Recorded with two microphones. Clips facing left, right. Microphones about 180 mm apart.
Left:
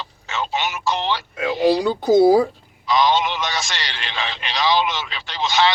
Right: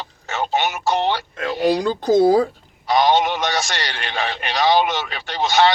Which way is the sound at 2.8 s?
50° right (ahead or behind).